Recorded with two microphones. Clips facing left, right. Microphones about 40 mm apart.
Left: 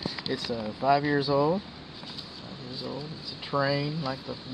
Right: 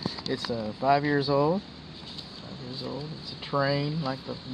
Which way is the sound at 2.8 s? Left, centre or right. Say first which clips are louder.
Even; centre.